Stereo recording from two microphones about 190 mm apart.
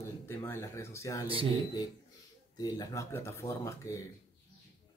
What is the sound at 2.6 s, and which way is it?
Speech, 20° left (ahead or behind).